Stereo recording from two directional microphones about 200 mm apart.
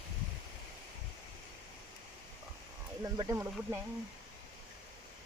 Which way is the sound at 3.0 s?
20° right (ahead or behind).